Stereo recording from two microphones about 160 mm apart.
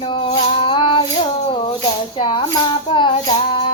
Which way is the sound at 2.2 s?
30° left (ahead or behind).